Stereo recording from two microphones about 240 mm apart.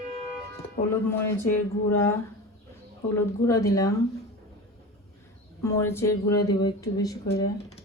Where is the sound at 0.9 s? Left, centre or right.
Centre.